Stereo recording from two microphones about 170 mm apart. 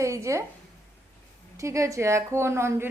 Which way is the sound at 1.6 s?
20° right (ahead or behind).